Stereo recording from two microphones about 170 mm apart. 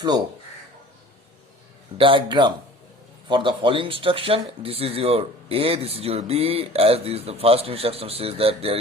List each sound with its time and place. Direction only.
2.0 s speech: 30° right (ahead or behind)